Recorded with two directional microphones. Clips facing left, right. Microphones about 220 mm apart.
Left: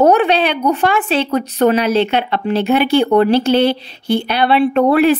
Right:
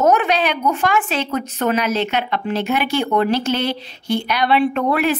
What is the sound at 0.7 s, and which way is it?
A woman's voice, 30° left (ahead or behind).